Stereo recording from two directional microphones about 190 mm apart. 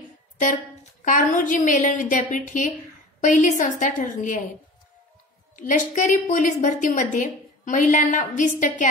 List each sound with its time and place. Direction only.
1.0 s a woman's voice: 45° left (ahead or behind)
5.6 s a woman's voice: 45° left (ahead or behind)